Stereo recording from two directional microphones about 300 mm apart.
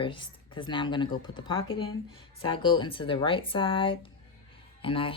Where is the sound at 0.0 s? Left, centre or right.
Centre.